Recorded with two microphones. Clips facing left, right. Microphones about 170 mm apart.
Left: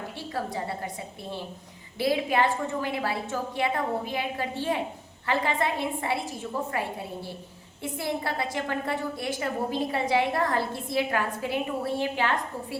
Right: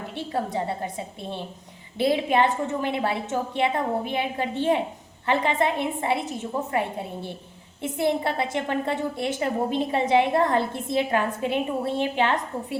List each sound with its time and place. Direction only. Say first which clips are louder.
0.2 s a woman's voice: right 5 dB; 25° right (ahead or behind)